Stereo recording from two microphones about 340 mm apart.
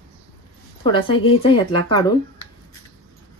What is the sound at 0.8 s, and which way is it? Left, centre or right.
Speech, centre.